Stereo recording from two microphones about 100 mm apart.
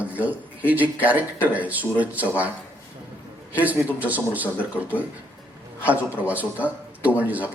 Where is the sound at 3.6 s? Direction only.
15° right (ahead or behind).